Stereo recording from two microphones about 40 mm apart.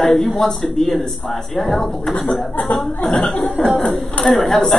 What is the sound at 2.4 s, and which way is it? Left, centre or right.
A woman's voice, left.